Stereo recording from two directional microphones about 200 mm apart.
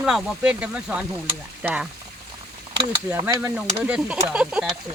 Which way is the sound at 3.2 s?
20° right (ahead or behind).